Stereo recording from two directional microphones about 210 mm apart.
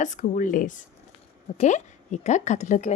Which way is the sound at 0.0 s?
35° left (ahead or behind).